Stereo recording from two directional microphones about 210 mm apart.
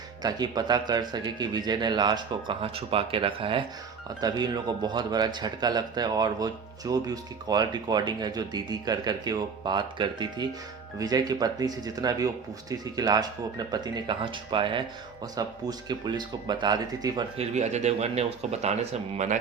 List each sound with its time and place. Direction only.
0.2 s speech: 20° right (ahead or behind)